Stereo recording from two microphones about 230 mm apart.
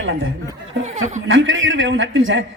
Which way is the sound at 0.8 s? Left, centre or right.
Right.